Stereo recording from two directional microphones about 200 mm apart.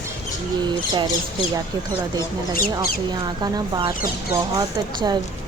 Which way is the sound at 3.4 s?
20° right (ahead or behind).